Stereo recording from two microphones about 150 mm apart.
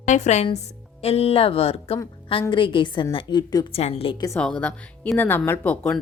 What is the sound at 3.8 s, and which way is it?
Speech, 45° left (ahead or behind).